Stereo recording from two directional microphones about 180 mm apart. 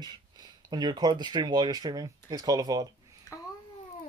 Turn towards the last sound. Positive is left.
turn(degrees=15)  # may be behind; listen again after turning